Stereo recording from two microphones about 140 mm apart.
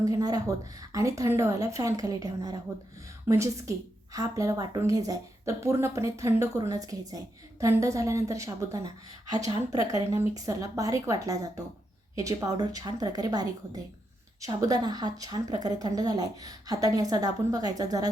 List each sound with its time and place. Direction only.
0.0 s speech: 25° right (ahead or behind)